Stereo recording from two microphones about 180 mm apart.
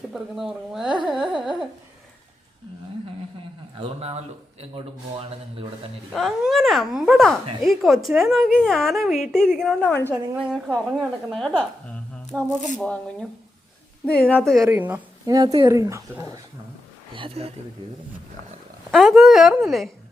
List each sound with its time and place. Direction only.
0.1 s a woman's voice: centre (ahead or behind)
1.0 s carnatic music: centre (ahead or behind)
3.8 s speech: 35° right (ahead or behind)
6.1 s a woman's voice: centre (ahead or behind)
10.1 s a woman's voice: 5° right (ahead or behind)
14.6 s speech: 10° right (ahead or behind)
15.3 s speech: 20° right (ahead or behind)
17.2 s speech: 30° right (ahead or behind)
18.9 s a woman's voice: centre (ahead or behind)